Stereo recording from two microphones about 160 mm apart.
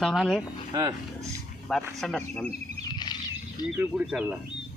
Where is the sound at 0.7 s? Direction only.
20° right (ahead or behind).